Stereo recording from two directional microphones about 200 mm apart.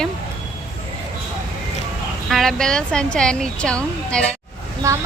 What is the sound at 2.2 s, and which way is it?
A woman's voice, centre (ahead or behind).